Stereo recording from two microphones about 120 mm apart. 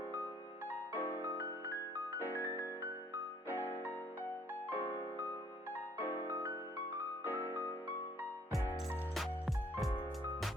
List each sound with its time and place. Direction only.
0.9 s music: 20° left (ahead or behind)
2.5 s music: 20° right (ahead or behind)
3.5 s music: 20° left (ahead or behind)
6.0 s music: 20° left (ahead or behind)
6.4 s music: 25° right (ahead or behind)
7.3 s music: 15° left (ahead or behind)
9.1 s music: centre (ahead or behind)